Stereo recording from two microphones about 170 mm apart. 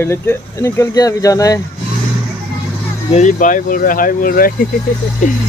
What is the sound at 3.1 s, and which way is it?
Speech, 45° left (ahead or behind).